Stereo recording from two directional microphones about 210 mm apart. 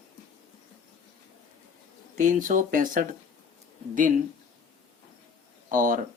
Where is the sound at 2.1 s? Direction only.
35° right (ahead or behind).